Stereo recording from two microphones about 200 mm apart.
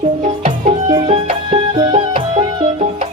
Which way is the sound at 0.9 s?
25° right (ahead or behind).